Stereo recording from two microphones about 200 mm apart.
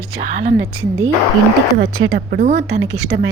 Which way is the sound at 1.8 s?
85° right.